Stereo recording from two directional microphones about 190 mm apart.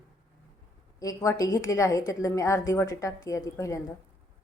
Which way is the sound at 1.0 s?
15° left (ahead or behind).